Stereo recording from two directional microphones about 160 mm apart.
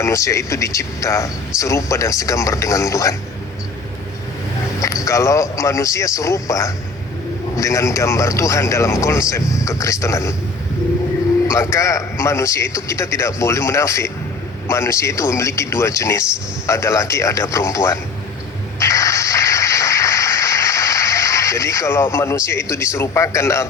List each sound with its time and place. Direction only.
0.0 s speech: 20° left (ahead or behind)
5.0 s speech: 20° left (ahead or behind)
11.7 s a man's voice: 20° left (ahead or behind)
18.8 s music: 20° left (ahead or behind)
22.7 s a man's voice: 15° left (ahead or behind)